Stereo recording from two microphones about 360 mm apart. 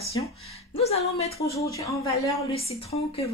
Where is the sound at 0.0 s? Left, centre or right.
Centre.